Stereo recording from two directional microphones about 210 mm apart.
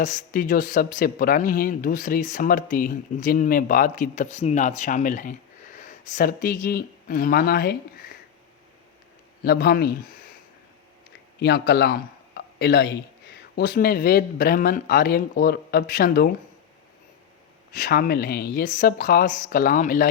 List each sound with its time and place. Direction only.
0.0 s speech: 35° left (ahead or behind)
9.4 s a man's voice: 50° left (ahead or behind)
11.3 s a man's voice: 50° left (ahead or behind)
17.7 s speech: 40° left (ahead or behind)